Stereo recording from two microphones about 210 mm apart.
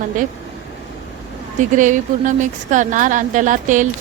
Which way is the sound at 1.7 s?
35° right (ahead or behind).